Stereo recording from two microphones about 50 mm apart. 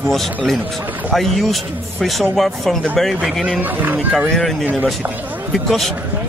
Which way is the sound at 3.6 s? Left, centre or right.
Right.